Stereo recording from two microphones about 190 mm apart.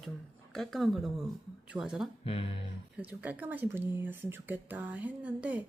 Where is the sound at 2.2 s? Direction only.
30° left (ahead or behind).